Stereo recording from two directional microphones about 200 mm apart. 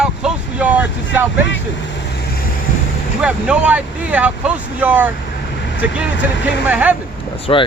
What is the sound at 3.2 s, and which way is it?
Speech, 5° right (ahead or behind).